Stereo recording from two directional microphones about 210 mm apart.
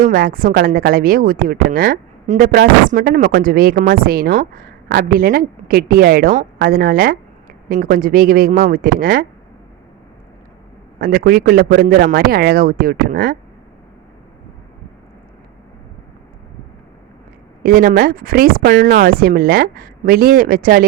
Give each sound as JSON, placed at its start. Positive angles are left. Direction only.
{"t": 0.0, "sound": "a woman's voice", "side_deg": -40}
{"t": 11.0, "sound": "a woman's voice", "side_deg": -45}
{"t": 17.6, "sound": "a woman's voice", "side_deg": -45}